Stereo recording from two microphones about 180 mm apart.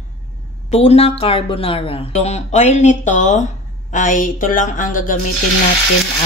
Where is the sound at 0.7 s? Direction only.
35° left (ahead or behind).